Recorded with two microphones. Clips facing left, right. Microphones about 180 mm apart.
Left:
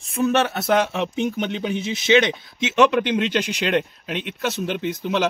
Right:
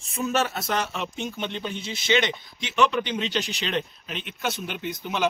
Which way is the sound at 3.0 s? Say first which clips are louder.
Left 6 dB; 65° left (ahead or behind).